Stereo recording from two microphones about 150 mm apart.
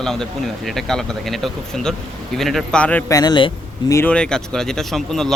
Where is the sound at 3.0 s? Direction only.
25° left (ahead or behind).